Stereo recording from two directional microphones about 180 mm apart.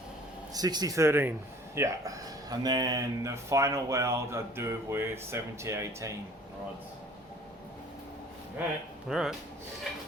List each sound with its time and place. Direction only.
0.5 s speech: 20° right (ahead or behind)
9.0 s speech: centre (ahead or behind)